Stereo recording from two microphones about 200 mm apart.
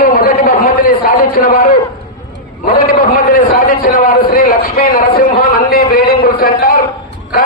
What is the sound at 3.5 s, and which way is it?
A man's voice, 45° left (ahead or behind).